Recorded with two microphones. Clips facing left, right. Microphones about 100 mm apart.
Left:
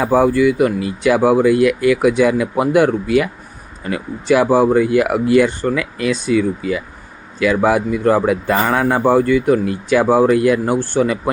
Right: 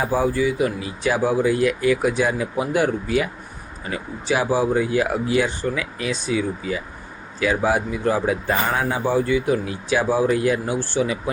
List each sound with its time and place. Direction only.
0.0 s speech: 65° left (ahead or behind)
9.0 s speech: 55° left (ahead or behind)